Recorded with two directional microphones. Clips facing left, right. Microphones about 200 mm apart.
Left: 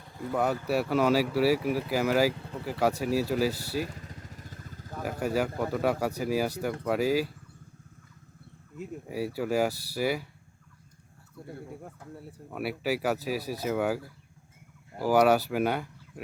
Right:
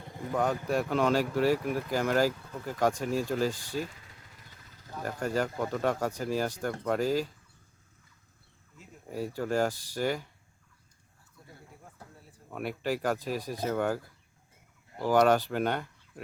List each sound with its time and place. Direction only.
0.0 s a sound: 20° right (ahead or behind)
0.7 s speech: 5° left (ahead or behind)
2.3 s speech: 30° left (ahead or behind)
2.6 s speech: 10° left (ahead or behind)
3.5 s speech: 40° left (ahead or behind)
3.8 s vehicle: 45° left (ahead or behind)
5.2 s speech: 10° left (ahead or behind)
9.0 s speech: 10° left (ahead or behind)
12.5 s speech: 5° left (ahead or behind)